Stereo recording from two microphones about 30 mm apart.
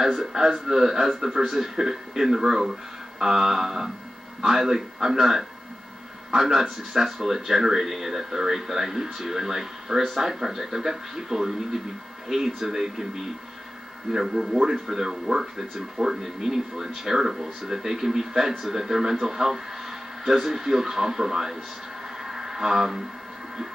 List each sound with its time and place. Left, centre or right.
0.0 s a man's voice: centre
14.1 s speech: centre
22.2 s a sound: centre